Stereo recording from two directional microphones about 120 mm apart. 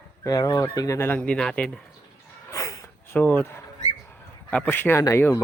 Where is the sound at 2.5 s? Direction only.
25° left (ahead or behind).